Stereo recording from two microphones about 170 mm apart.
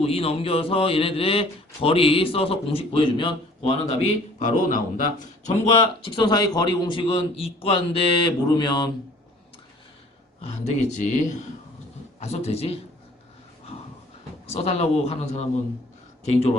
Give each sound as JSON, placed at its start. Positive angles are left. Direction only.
{"t": 0.0, "sound": "a man's voice", "side_deg": 35}
{"t": 6.1, "sound": "a man's voice", "side_deg": 25}
{"t": 10.4, "sound": "speech", "side_deg": 45}
{"t": 12.2, "sound": "a man's voice", "side_deg": 40}
{"t": 14.4, "sound": "a man's voice", "side_deg": 35}